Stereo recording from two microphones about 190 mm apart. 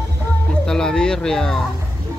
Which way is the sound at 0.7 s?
5° left (ahead or behind).